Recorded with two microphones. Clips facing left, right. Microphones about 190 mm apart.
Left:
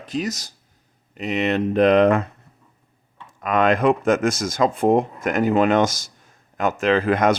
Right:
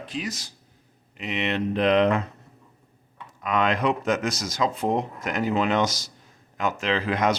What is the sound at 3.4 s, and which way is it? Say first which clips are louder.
Speech: left 5 dB; 50° left (ahead or behind).